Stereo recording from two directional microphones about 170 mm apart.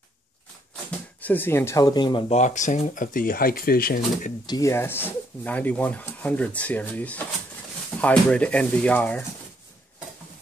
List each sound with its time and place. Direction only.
1.2 s speech: 10° left (ahead or behind); by 2.3 s 25° left (ahead or behind)
2.3 s speech: 45° left (ahead or behind)
4.5 s speech: 20° left (ahead or behind)